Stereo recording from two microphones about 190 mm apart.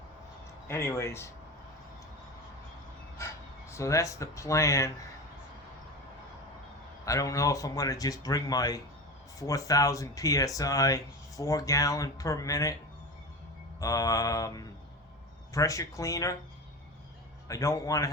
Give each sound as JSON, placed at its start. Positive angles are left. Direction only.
{"t": 0.7, "sound": "speech", "side_deg": 15}
{"t": 3.7, "sound": "speech", "side_deg": 15}
{"t": 7.0, "sound": "speech", "side_deg": 15}
{"t": 13.7, "sound": "speech", "side_deg": 20}
{"t": 17.5, "sound": "speech", "side_deg": 15}